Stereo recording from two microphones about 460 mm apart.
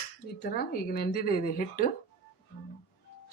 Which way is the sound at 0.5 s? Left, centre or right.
Centre.